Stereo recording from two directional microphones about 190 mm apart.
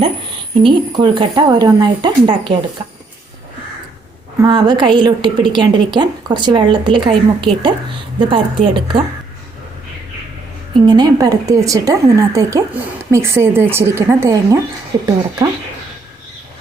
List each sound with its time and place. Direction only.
0.6 s a woman's voice: 25° right (ahead or behind)
4.4 s a woman's voice: 20° right (ahead or behind)
10.8 s a woman's voice: 20° right (ahead or behind)